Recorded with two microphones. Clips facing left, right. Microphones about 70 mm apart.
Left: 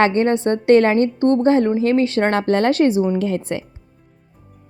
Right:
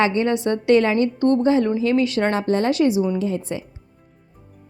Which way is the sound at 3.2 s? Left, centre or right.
Left.